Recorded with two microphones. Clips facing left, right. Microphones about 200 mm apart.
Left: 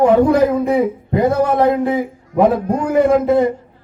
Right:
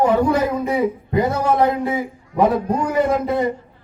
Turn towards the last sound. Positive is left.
turn(degrees=55)  # may be behind; listen again after turning